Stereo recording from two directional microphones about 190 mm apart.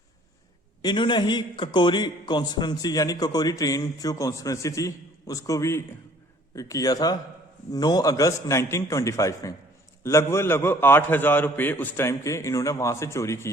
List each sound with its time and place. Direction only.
0.8 s a man's voice: 25° left (ahead or behind)